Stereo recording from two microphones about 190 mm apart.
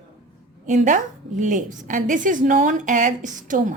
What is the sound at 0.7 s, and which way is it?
A woman's voice, 40° right (ahead or behind).